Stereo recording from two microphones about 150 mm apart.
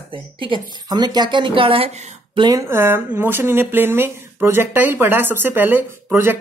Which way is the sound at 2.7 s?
15° right (ahead or behind).